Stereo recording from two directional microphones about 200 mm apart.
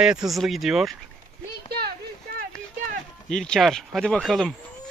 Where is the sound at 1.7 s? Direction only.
50° right (ahead or behind).